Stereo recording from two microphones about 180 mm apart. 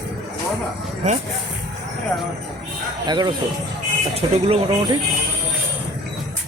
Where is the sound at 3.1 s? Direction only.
25° right (ahead or behind).